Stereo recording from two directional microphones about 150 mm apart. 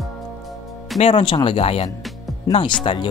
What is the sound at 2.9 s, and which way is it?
Speech, 40° left (ahead or behind).